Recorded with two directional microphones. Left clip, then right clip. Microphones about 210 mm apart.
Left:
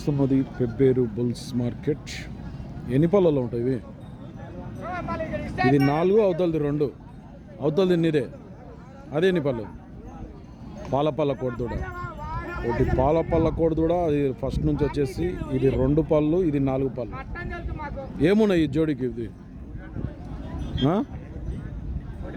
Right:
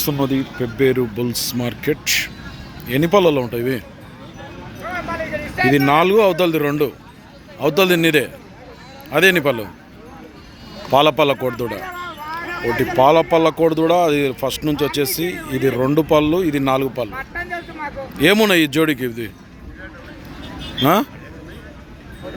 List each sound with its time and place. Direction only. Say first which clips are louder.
0.6 s speech: right 5 dB; centre (ahead or behind)
3.0 s speech: right 6 dB; 5° left (ahead or behind)
4.9 s a sound: right 6 dB; 45° right (ahead or behind)
5.7 s speech: right 8 dB; 5° right (ahead or behind)
10.9 s speech: right 10 dB; 5° right (ahead or behind)
11.3 s speech: right 7 dB; 35° right (ahead or behind)
13.1 s speech: right 10 dB; 5° right (ahead or behind)
15.0 s speech: right 6 dB; 55° right (ahead or behind)
16.0 s speech: right 7 dB; 5° right (ahead or behind)
17.1 s vehicle: right 9 dB; 40° right (ahead or behind)
18.2 s speech: right 7 dB; centre (ahead or behind)
20.8 s speech: right 9 dB; 10° right (ahead or behind)